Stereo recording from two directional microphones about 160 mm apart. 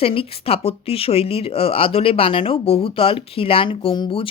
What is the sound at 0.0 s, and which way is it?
Speech, 35° left (ahead or behind).